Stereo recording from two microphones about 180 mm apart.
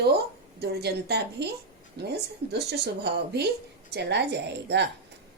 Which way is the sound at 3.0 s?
65° right (ahead or behind).